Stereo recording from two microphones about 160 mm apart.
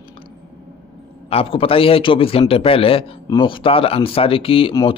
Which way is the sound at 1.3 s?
35° left (ahead or behind).